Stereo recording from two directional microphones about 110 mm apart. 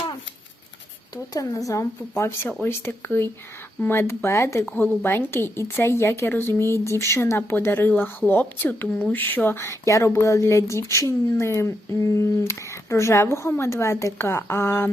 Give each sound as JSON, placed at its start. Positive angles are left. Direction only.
{"t": 1.1, "sound": "speech", "side_deg": 35}